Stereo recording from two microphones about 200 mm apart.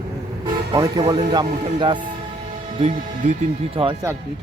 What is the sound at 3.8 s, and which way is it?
Speech, 30° right (ahead or behind).